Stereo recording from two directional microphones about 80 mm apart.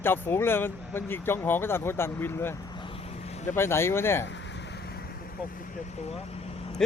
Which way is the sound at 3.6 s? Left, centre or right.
Left.